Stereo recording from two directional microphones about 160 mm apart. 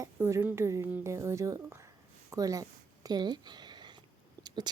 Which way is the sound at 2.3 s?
20° right (ahead or behind).